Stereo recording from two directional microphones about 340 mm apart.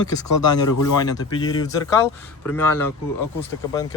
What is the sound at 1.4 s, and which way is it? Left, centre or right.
Speech, centre.